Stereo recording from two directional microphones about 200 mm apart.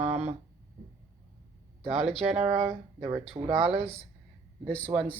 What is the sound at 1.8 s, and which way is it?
Speech, 30° right (ahead or behind).